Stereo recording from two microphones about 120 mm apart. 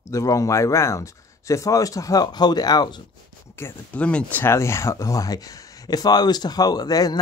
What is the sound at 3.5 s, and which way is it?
Speech, 15° left (ahead or behind).